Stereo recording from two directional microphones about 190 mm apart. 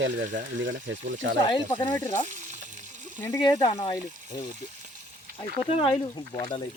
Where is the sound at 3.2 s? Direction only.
20° left (ahead or behind).